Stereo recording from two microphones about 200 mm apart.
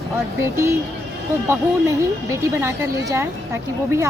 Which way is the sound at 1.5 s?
15° right (ahead or behind).